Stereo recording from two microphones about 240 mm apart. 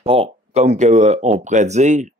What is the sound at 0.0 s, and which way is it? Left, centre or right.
Speech, right.